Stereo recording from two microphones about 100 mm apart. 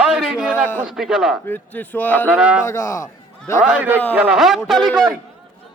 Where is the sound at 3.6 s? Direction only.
15° right (ahead or behind); by 4.9 s centre (ahead or behind).